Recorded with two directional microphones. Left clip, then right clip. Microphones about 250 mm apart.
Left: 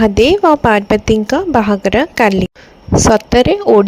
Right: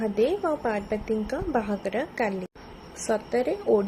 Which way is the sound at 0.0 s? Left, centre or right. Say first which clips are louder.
Left 15 dB; left.